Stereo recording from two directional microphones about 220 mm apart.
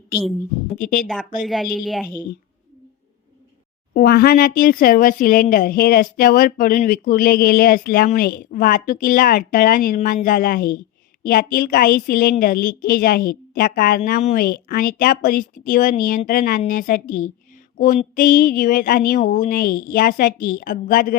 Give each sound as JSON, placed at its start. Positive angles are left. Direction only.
{"t": 1.0, "sound": "speech", "side_deg": 5}
{"t": 3.9, "sound": "speech", "side_deg": 45}